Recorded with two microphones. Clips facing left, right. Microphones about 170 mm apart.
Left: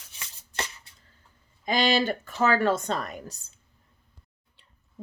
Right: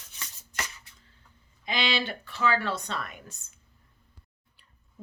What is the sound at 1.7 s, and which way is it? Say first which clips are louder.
Speech: left 6 dB; 45° left (ahead or behind).